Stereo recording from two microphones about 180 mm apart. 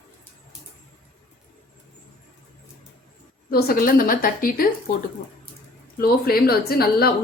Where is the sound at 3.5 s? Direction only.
55° left (ahead or behind).